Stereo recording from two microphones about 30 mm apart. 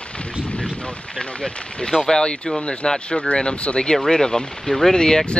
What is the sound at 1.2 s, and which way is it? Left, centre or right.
Speech, left.